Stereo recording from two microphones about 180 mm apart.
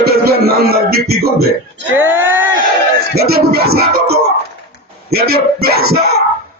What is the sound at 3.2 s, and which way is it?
Music, 60° right (ahead or behind).